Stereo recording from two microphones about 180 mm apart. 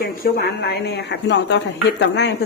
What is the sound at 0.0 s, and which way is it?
A woman's voice, 55° left (ahead or behind).